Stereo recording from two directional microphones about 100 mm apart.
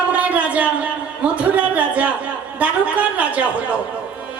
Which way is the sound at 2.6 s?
15° right (ahead or behind).